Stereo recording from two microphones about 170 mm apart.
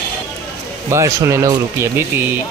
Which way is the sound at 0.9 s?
20° right (ahead or behind).